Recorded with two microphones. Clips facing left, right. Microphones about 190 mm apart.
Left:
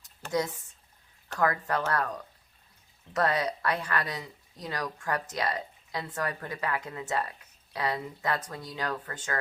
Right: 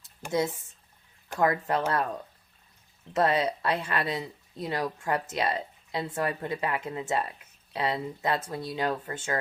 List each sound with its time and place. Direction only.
0.3 s speech: 25° right (ahead or behind)